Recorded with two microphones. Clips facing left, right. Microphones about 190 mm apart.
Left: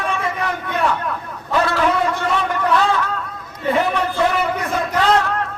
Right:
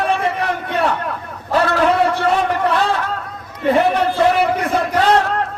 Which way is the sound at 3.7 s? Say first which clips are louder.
Right 4 dB; 30° right (ahead or behind).